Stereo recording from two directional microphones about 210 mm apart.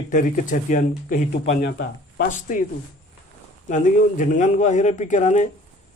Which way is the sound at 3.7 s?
40° left (ahead or behind).